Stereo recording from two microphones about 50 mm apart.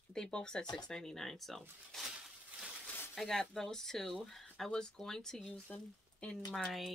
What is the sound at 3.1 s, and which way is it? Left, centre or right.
Speech, centre.